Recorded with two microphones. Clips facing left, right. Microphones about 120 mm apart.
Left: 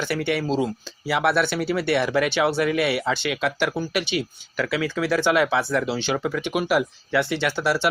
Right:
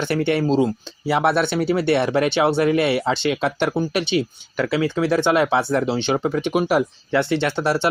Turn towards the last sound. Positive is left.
turn(degrees=-25)  # may be behind; listen again after turning